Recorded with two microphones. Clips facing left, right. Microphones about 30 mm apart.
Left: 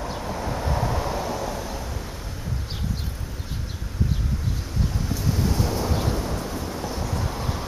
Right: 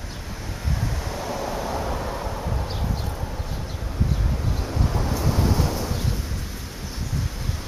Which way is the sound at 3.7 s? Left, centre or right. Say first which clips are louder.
Even; centre.